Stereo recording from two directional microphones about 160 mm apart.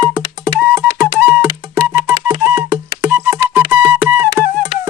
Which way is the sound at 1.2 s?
10° right (ahead or behind).